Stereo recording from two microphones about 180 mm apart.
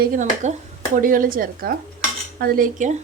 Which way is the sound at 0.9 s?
50° right (ahead or behind).